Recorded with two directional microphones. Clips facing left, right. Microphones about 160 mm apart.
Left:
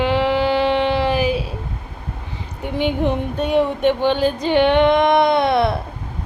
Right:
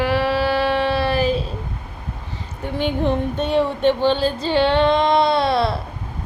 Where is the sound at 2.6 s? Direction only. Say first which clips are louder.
Left 2 dB; 15° left (ahead or behind).